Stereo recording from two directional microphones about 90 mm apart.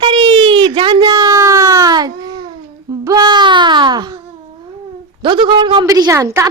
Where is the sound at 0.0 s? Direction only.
70° right (ahead or behind); by 1.4 s 55° right (ahead or behind).